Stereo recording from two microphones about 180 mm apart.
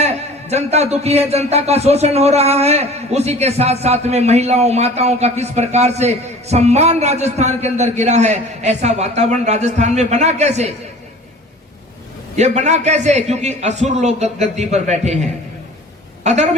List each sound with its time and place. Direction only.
0.0 s a man's voice: 35° right (ahead or behind)
12.4 s a man's voice: 40° right (ahead or behind)
16.2 s a woman's voice: 40° right (ahead or behind)